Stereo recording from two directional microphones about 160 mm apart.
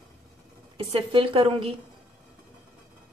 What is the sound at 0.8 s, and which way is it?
Speech, 35° right (ahead or behind).